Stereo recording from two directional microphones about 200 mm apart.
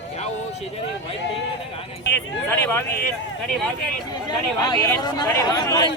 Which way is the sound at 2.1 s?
10° left (ahead or behind).